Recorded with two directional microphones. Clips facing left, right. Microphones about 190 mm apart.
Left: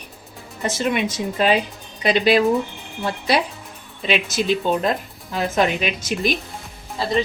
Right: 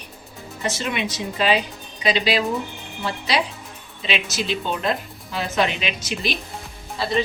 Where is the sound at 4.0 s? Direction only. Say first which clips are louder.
Left 4 dB; 50° left (ahead or behind).